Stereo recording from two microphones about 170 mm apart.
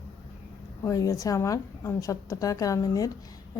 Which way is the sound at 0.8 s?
20° left (ahead or behind).